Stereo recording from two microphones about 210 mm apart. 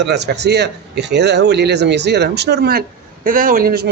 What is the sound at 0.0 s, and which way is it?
A man's voice, 55° right (ahead or behind).